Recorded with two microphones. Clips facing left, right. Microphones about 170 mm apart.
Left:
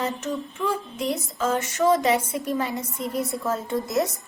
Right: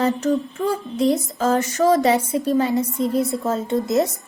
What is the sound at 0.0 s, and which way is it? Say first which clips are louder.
A child's voice: right 8 dB; 35° right (ahead or behind).